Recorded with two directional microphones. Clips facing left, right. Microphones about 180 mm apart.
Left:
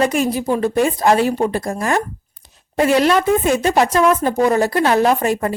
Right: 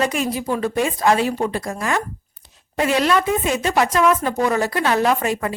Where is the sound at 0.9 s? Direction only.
40° left (ahead or behind).